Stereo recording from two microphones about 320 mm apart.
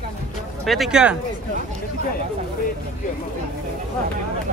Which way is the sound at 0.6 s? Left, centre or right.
Centre.